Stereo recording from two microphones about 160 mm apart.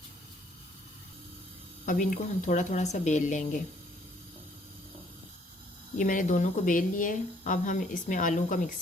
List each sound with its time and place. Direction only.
1.8 s speech: 55° left (ahead or behind)
6.0 s speech: 55° left (ahead or behind)